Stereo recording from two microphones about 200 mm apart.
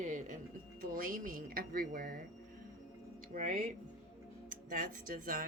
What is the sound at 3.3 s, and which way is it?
Speech, 40° right (ahead or behind).